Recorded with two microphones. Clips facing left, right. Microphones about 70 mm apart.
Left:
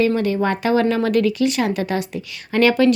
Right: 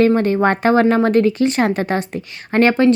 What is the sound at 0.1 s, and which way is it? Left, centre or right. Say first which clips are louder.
Speech: right 4 dB; right.